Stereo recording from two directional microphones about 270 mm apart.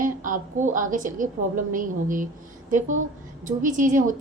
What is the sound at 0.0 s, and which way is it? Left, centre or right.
A woman's voice, right.